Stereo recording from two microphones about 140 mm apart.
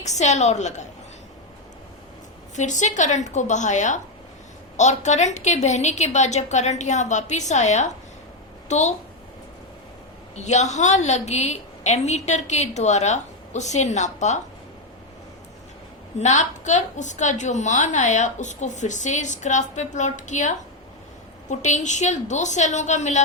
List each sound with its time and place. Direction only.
0.0 s a woman's voice: 55° left (ahead or behind)
2.6 s a woman's voice: 60° left (ahead or behind)
10.3 s a woman's voice: 55° left (ahead or behind)
16.1 s a woman's voice: 60° left (ahead or behind)